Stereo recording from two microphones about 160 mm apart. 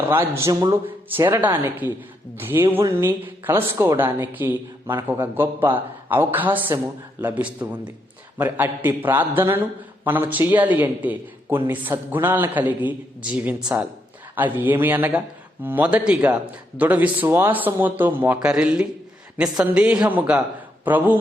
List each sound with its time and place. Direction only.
0.1 s a man's voice: 15° right (ahead or behind)